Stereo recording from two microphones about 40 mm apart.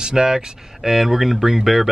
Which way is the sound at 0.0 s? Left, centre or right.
Centre.